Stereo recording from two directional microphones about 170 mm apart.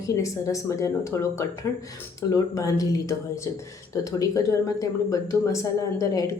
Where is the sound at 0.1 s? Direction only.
20° left (ahead or behind).